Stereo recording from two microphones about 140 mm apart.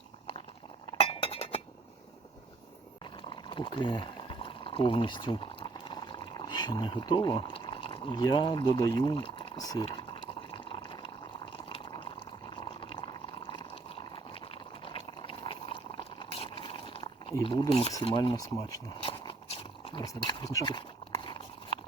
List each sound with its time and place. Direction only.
0.9 s chink: 45° left (ahead or behind)
3.2 s boiling: 35° left (ahead or behind)
8.8 s speech: 30° left (ahead or behind)
10.5 s water: 40° left (ahead or behind)
12.5 s boiling: 35° left (ahead or behind)
13.5 s a sound: 40° left (ahead or behind)
17.4 s speech: 35° left (ahead or behind)
18.3 s speech: 25° left (ahead or behind)
19.2 s a sound: 40° left (ahead or behind)